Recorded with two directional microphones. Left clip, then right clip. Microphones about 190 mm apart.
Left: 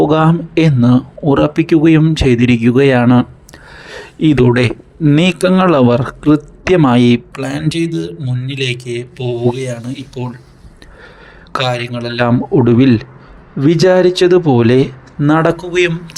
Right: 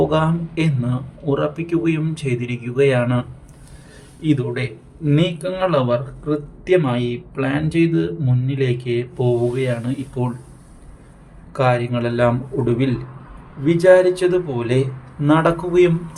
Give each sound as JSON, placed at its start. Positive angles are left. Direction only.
{"t": 0.0, "sound": "speech", "side_deg": 40}
{"t": 3.8, "sound": "a sound", "side_deg": 50}
{"t": 5.1, "sound": "speech", "side_deg": 55}
{"t": 7.3, "sound": "speech", "side_deg": 0}
{"t": 7.7, "sound": "speech", "side_deg": 50}
{"t": 9.3, "sound": "speech", "side_deg": 0}
{"t": 10.2, "sound": "speech", "side_deg": 40}
{"t": 11.5, "sound": "speech", "side_deg": 45}